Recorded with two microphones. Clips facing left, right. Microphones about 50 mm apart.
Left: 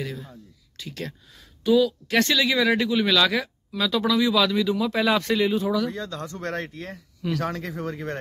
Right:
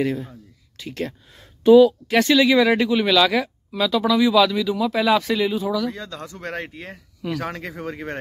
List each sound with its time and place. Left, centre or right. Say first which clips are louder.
0.0 s speech: right 10 dB; right; by 5.9 s centre
6.0 s speech: left 1 dB; centre
7.2 s speech: even; centre
7.9 s speech: right 1 dB; right